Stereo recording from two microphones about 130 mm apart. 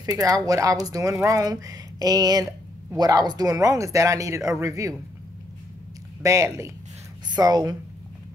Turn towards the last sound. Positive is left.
turn(degrees=-30)  # may be behind; listen again after turning